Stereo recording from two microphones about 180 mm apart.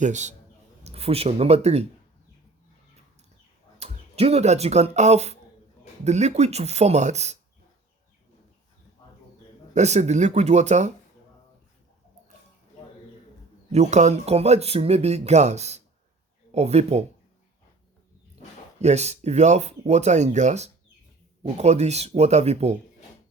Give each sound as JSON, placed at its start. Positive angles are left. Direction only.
{"t": 0.0, "sound": "speech", "side_deg": -40}
{"t": 3.8, "sound": "speech", "side_deg": -35}
{"t": 9.7, "sound": "speech", "side_deg": -40}
{"t": 13.7, "sound": "speech", "side_deg": -40}
{"t": 18.8, "sound": "speech", "side_deg": -40}